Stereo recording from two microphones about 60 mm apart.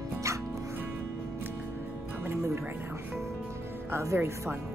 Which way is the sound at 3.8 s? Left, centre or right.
Right.